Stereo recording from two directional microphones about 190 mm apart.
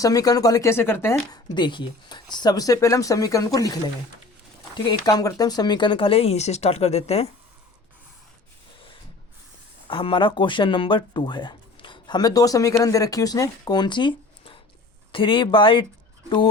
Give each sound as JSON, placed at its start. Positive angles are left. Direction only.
{"t": 0.0, "sound": "speech", "side_deg": 20}
{"t": 1.5, "sound": "speech", "side_deg": 25}
{"t": 4.9, "sound": "speech", "side_deg": 20}
{"t": 9.8, "sound": "speech", "side_deg": 25}